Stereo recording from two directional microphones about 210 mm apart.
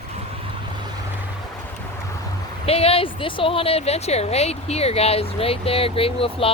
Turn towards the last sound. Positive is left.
turn(degrees=25)  # may be behind; listen again after turning